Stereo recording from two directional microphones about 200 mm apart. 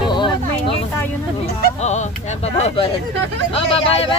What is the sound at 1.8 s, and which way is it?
Speech, 35° left (ahead or behind).